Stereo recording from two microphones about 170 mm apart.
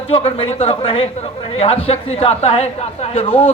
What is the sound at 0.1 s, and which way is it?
A man's voice, 35° left (ahead or behind).